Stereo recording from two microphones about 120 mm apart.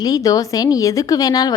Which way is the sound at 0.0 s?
30° left (ahead or behind).